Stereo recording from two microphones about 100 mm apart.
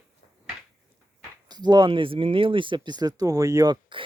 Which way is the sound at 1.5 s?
45° right (ahead or behind).